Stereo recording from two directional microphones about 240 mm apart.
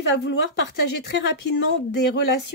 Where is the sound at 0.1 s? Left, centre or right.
Left.